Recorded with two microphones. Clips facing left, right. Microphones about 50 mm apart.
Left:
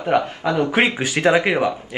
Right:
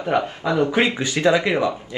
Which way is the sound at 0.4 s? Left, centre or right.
Left.